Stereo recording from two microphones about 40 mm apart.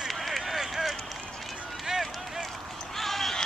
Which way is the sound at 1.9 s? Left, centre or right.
Centre.